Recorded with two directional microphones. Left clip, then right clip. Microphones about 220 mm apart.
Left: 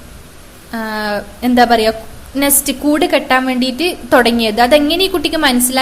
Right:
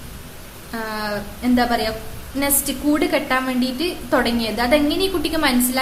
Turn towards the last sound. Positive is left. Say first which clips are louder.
# left 6 dB
turn(degrees=30)  # may be behind; listen again after turning